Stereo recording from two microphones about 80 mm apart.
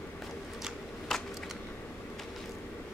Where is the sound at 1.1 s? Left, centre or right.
Centre.